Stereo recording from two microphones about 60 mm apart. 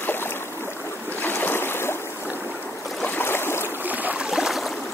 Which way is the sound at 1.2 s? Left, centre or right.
Left.